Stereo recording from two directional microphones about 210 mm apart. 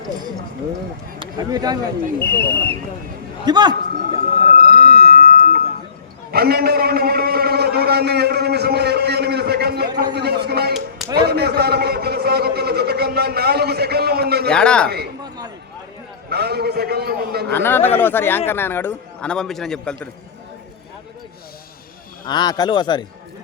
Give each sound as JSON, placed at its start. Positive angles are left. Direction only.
{"t": 1.2, "sound": "speech", "side_deg": -20}
{"t": 2.1, "sound": "a man's voice", "side_deg": 10}
{"t": 3.4, "sound": "a man's voice", "side_deg": -20}
{"t": 4.5, "sound": "a sound", "side_deg": -45}
{"t": 6.3, "sound": "a man's voice", "side_deg": -45}
{"t": 14.5, "sound": "speech", "side_deg": 5}
{"t": 14.8, "sound": "a man's voice", "side_deg": -50}
{"t": 15.2, "sound": "a sound", "side_deg": -20}
{"t": 16.3, "sound": "a sound", "side_deg": -50}
{"t": 17.5, "sound": "a man's voice", "side_deg": 10}
{"t": 22.3, "sound": "speech", "side_deg": 20}